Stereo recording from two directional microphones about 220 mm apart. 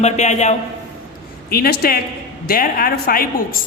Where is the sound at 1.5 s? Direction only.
45° left (ahead or behind).